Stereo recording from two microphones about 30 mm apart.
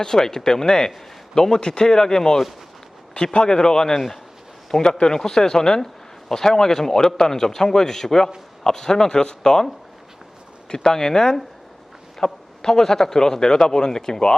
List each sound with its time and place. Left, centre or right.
0.0 s speech: centre
10.7 s speech: left